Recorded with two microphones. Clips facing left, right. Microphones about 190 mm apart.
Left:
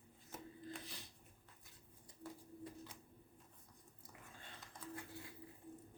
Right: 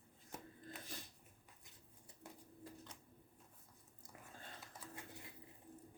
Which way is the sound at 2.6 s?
5° left (ahead or behind).